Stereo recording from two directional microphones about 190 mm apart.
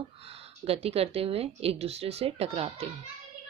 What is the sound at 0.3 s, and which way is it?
Speech, 30° right (ahead or behind).